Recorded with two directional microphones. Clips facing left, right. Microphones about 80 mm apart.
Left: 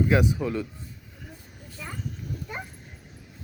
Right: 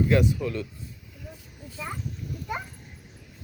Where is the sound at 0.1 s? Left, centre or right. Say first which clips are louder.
Even; centre.